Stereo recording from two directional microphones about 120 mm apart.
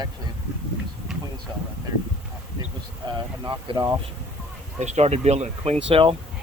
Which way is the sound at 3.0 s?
35° right (ahead or behind).